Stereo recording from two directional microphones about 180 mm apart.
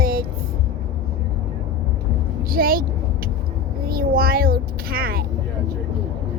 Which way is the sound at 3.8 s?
55° right (ahead or behind).